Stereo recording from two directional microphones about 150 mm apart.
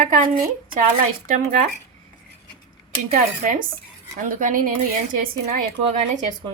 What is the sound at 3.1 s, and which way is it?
Speech, 65° right (ahead or behind).